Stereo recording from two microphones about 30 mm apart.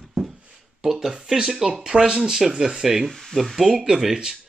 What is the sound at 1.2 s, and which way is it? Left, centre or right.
Speech, right.